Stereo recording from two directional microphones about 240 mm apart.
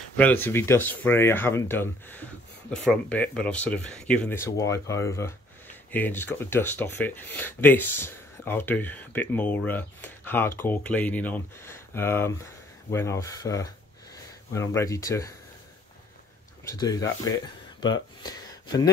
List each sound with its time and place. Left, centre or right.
0.2 s speech: centre
16.6 s speech: centre
17.7 s a sound: centre